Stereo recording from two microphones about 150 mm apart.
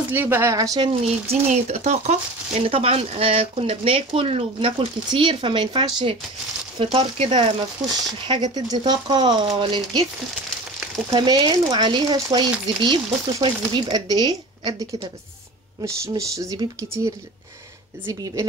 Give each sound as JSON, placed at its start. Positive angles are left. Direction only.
{"t": 0.1, "sound": "speech", "side_deg": -15}
{"t": 0.7, "sound": "speech", "side_deg": -40}
{"t": 11.1, "sound": "speech", "side_deg": -30}
{"t": 18.0, "sound": "speech", "side_deg": -25}